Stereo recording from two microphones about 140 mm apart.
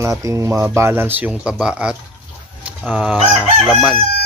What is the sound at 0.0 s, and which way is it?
Speech, 20° right (ahead or behind).